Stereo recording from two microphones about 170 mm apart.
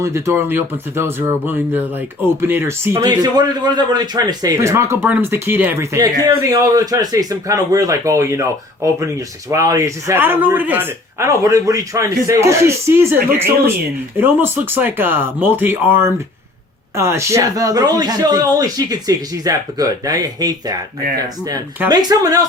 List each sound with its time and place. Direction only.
0.0 s a man's voice: 15° right (ahead or behind)
14.2 s a man's voice: 10° right (ahead or behind)
21.8 s a man's voice: 20° right (ahead or behind)